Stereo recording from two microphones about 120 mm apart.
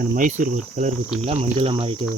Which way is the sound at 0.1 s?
90° right.